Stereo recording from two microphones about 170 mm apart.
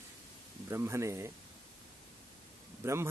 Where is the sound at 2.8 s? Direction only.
15° right (ahead or behind).